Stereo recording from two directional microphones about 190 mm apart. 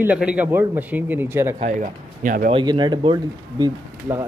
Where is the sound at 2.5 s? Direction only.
25° right (ahead or behind).